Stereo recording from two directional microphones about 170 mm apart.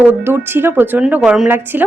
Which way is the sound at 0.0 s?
10° right (ahead or behind).